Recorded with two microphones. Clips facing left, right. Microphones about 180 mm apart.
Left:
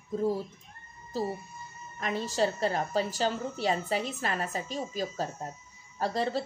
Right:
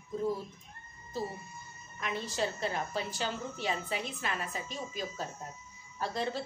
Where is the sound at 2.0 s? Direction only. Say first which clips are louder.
Left 5 dB; 45° left (ahead or behind).